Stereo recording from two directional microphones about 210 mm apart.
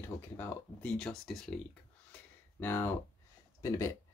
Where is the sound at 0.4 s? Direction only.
5° left (ahead or behind).